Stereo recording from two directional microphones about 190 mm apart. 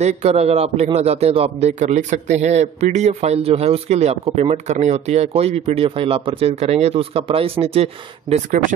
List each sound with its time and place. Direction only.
0.0 s a man's voice: 35° right (ahead or behind)